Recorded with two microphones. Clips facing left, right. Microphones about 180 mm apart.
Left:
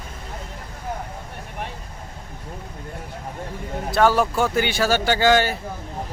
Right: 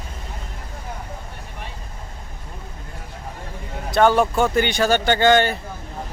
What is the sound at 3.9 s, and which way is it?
Speech, 5° left (ahead or behind).